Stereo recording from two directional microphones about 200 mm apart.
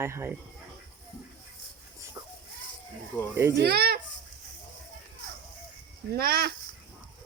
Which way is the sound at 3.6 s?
50° right (ahead or behind).